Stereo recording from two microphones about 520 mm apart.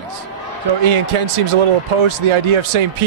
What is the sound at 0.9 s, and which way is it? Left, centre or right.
Speech, right.